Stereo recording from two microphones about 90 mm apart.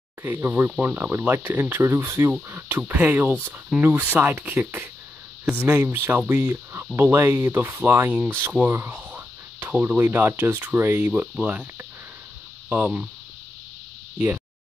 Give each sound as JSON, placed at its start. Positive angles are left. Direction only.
{"t": 0.2, "sound": "speech", "side_deg": -25}
{"t": 6.5, "sound": "speech", "side_deg": -30}
{"t": 12.6, "sound": "speech", "side_deg": -15}
{"t": 14.1, "sound": "speech", "side_deg": -15}